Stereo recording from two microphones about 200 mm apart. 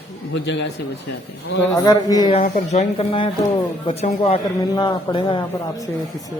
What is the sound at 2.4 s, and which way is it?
A man's voice, 35° left (ahead or behind).